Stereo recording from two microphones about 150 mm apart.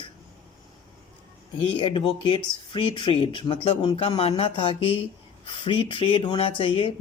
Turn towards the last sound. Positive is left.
turn(degrees=35)  # may be behind; listen again after turning